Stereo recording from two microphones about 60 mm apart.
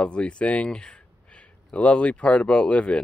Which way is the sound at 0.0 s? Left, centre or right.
Centre.